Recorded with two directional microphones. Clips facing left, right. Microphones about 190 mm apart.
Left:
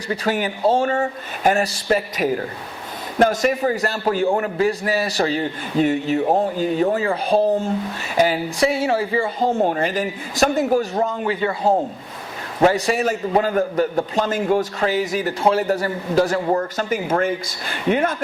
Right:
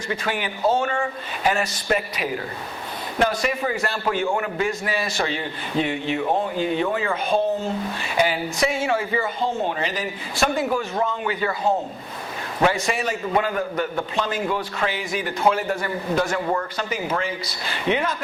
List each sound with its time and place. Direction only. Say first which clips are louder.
0.1 s a man's voice: left 5 dB; 40° left (ahead or behind)
0.6 s a man's voice: left 3 dB; 30° left (ahead or behind)
9.4 s a man's voice: left 5 dB; 45° left (ahead or behind)
11.3 s a man's voice: left 5 dB; 30° left (ahead or behind); by 18.2 s 50° left (ahead or behind)